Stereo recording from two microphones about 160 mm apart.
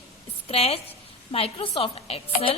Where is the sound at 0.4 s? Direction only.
40° left (ahead or behind).